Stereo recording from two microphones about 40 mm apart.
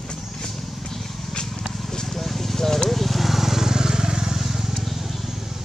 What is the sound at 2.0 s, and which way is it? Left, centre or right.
Vehicle, centre.